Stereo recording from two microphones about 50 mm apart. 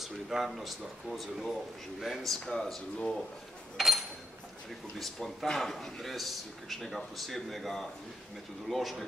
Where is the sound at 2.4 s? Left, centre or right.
Centre.